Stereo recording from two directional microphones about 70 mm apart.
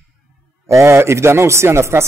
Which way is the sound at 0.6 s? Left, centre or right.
Right.